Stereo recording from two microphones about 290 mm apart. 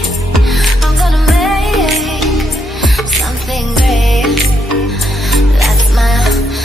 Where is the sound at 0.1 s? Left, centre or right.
Centre.